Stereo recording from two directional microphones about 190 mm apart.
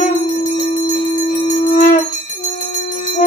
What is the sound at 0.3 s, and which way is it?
Bell, 45° left (ahead or behind).